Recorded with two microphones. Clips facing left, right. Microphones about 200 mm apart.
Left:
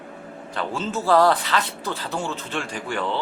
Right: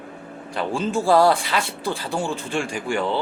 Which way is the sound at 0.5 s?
15° right (ahead or behind).